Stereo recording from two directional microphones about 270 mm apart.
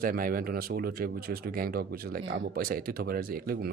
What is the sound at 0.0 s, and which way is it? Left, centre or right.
Speech, right.